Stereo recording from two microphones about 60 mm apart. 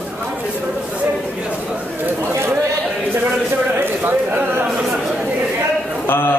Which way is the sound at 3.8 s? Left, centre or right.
Right.